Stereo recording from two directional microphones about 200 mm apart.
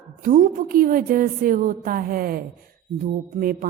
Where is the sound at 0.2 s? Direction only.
40° right (ahead or behind).